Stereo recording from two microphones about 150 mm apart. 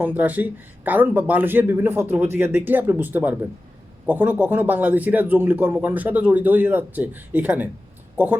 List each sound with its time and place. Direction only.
0.0 s a man's voice: 10° right (ahead or behind)